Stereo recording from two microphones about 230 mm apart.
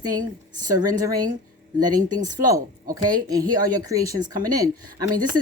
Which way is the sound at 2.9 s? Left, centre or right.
Centre.